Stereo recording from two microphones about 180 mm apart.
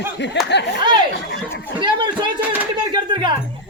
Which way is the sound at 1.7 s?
25° right (ahead or behind).